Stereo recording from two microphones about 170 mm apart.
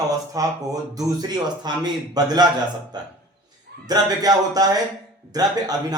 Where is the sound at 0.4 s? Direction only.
20° right (ahead or behind).